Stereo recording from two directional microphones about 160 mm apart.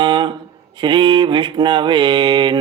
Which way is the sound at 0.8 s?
30° right (ahead or behind).